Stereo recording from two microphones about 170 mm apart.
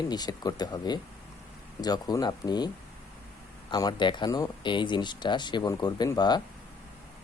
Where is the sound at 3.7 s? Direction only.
25° left (ahead or behind).